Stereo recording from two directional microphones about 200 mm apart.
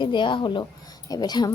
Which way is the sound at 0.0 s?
25° left (ahead or behind).